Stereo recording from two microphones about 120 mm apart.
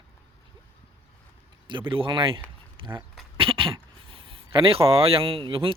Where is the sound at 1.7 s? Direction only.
45° right (ahead or behind).